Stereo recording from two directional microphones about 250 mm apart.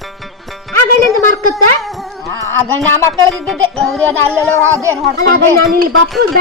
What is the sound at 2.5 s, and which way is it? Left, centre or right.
Speech, right.